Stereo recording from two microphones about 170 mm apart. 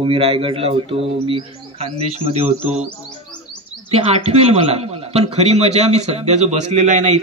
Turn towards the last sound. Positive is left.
turn(degrees=-45)  # may be behind; listen again after turning